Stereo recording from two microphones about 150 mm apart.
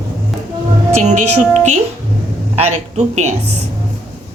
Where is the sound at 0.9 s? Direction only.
50° right (ahead or behind).